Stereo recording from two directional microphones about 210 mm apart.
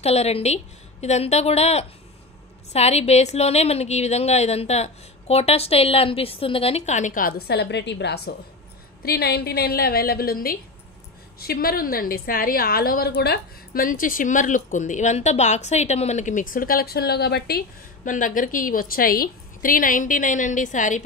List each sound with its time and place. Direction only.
0.0 s a woman's voice: 30° left (ahead or behind)
7.4 s a woman's voice: 55° left (ahead or behind); by 21.0 s 35° left (ahead or behind)